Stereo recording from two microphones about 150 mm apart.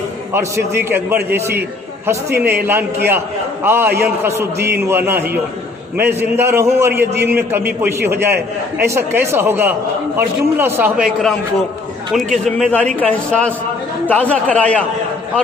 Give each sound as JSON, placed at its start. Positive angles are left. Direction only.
{"t": 0.3, "sound": "a man's voice", "side_deg": -15}